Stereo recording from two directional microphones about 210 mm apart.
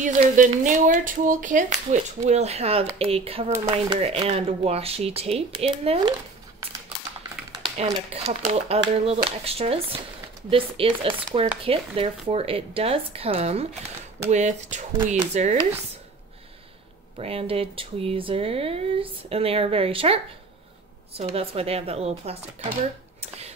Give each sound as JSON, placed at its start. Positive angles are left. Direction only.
{"t": 0.0, "sound": "speech", "side_deg": -35}
{"t": 7.6, "sound": "speech", "side_deg": -30}
{"t": 17.2, "sound": "speech", "side_deg": -25}